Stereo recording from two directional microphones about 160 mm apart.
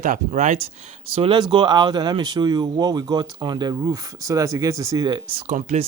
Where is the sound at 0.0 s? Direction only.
50° right (ahead or behind).